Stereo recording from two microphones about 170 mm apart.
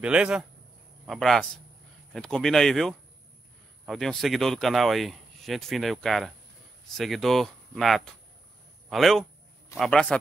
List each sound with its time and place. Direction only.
0.0 s speech: 5° right (ahead or behind)